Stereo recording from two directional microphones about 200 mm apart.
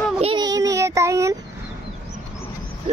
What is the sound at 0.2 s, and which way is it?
Child singing, 25° right (ahead or behind).